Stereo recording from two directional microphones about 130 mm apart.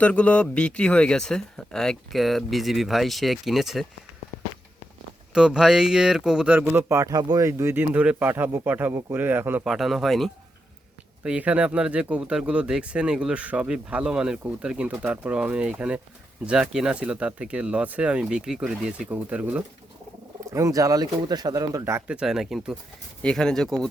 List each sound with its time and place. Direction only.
0.0 s speech: 10° left (ahead or behind)
5.3 s speech: 5° right (ahead or behind)
9.6 s speech: centre (ahead or behind)
20.4 s speech: 25° right (ahead or behind)
22.0 s speech: 5° right (ahead or behind)